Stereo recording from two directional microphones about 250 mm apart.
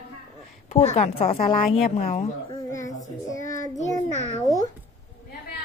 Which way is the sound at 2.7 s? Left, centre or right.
Centre.